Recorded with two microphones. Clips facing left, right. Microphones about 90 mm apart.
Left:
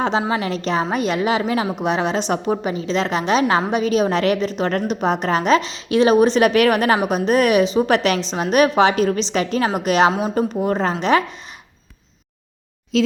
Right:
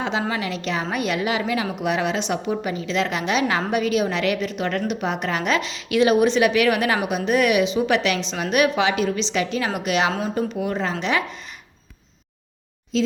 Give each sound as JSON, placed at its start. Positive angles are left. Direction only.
{"t": 0.0, "sound": "a woman's voice", "side_deg": 30}
{"t": 10.1, "sound": "speech", "side_deg": 20}
{"t": 10.3, "sound": "a woman's voice", "side_deg": 40}
{"t": 12.9, "sound": "speech", "side_deg": 70}